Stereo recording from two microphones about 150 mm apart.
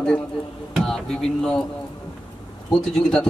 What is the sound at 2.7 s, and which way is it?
Speech, 5° left (ahead or behind).